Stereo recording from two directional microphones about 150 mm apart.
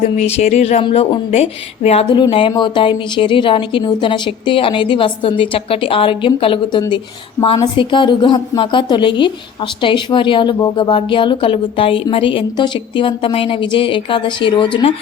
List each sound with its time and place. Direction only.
0.2 s speech: 45° left (ahead or behind)
1.3 s a woman's voice: 45° left (ahead or behind)